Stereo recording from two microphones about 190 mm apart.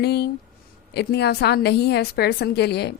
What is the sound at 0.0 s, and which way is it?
A woman's voice, 60° left (ahead or behind).